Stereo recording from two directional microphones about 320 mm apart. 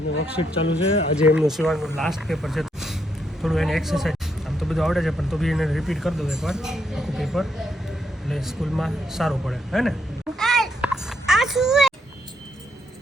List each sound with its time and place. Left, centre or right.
0.6 s speech: centre
1.1 s speech: centre
10.3 s a sound: centre